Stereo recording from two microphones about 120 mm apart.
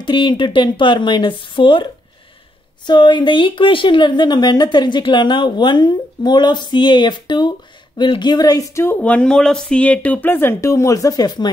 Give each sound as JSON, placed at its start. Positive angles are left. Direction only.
{"t": 0.0, "sound": "speech", "side_deg": 40}
{"t": 2.9, "sound": "speech", "side_deg": 40}